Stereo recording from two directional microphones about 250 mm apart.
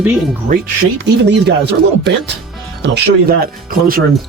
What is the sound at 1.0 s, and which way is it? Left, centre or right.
Speech, right.